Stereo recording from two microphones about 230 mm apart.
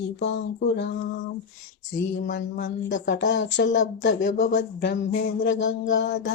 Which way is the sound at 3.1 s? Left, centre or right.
Left.